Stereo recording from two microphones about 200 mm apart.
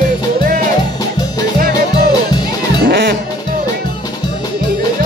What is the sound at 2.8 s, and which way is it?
Music, 50° right (ahead or behind).